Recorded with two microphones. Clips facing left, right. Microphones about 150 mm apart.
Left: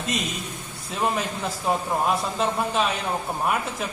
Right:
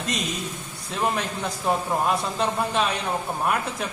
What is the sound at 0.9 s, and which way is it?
A man's voice, centre (ahead or behind).